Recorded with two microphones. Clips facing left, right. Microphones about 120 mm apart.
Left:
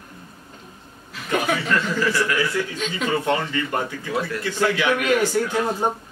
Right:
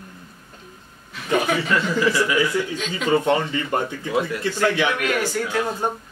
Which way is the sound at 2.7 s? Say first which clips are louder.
Even; centre (ahead or behind).